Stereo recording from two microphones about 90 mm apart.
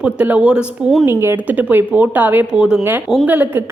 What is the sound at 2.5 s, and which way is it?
Speech, 10° right (ahead or behind).